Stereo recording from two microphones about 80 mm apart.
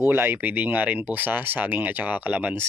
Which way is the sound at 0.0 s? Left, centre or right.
Right.